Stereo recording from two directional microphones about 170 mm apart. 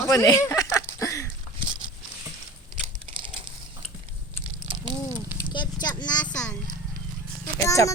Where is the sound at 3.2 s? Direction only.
30° right (ahead or behind).